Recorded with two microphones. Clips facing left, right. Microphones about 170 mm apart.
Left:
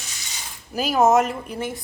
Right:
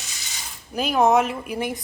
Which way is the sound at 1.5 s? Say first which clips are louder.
Right 4 dB; 15° right (ahead or behind).